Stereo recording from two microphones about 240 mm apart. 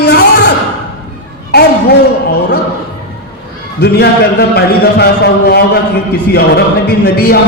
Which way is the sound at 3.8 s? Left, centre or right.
Left.